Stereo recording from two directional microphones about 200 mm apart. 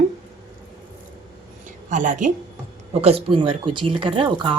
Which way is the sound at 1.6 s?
40° right (ahead or behind).